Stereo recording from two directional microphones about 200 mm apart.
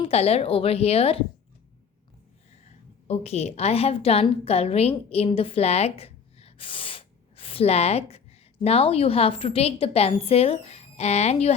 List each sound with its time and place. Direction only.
0.0 s a woman's voice: 30° left (ahead or behind)
3.1 s a woman's voice: 30° left (ahead or behind)